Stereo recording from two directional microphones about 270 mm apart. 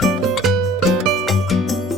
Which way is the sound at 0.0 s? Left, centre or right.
Centre.